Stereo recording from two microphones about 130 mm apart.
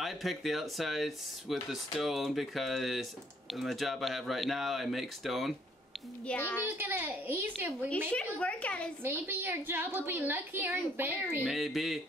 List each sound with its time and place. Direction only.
0.0 s speech: centre (ahead or behind)
6.2 s a woman's voice: 15° left (ahead or behind)
6.8 s a woman's voice: 15° right (ahead or behind)
8.1 s a woman's voice: 10° left (ahead or behind)
9.0 s a woman's voice: 15° right (ahead or behind)
11.4 s speech: centre (ahead or behind)